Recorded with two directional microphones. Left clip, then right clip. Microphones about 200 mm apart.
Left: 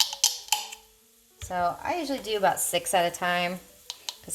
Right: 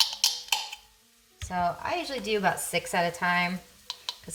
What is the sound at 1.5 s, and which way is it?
Speech, 35° left (ahead or behind).